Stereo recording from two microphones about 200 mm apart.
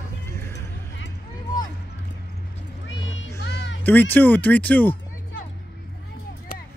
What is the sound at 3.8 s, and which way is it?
Speech, 10° left (ahead or behind).